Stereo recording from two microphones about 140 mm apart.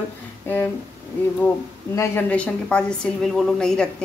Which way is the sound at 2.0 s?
10° left (ahead or behind).